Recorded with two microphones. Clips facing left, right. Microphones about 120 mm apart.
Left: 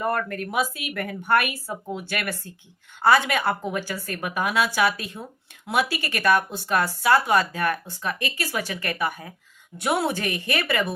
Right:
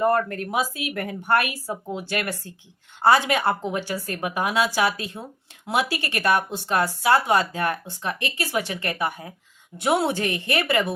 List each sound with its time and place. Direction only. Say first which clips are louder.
0.0 s speech: right 4 dB; 30° right (ahead or behind)